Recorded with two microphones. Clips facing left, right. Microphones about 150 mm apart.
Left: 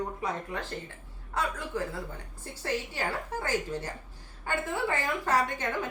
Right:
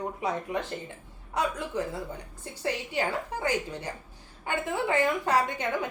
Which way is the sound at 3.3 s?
15° right (ahead or behind).